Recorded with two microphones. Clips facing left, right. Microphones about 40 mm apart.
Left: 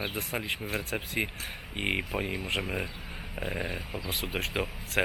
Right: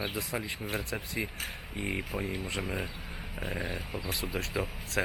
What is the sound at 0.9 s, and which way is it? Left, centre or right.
Speech, left.